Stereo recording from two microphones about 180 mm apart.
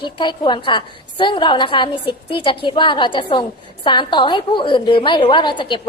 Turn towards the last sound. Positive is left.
turn(degrees=25)  # may be behind; listen again after turning